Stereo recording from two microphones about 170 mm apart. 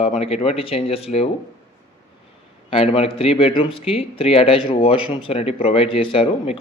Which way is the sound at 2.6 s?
35° left (ahead or behind).